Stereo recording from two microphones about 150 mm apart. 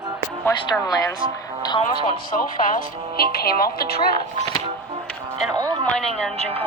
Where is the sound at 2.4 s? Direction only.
80° left.